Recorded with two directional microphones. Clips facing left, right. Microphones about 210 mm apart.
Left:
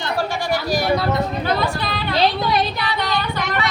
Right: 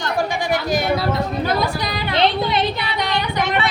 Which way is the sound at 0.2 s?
15° right (ahead or behind).